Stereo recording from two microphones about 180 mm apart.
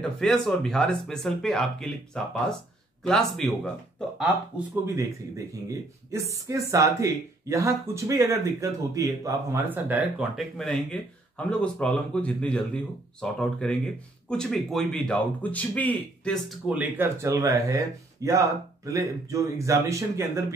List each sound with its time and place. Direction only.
0.0 s speech: centre (ahead or behind)
5.5 s speech: 15° right (ahead or behind)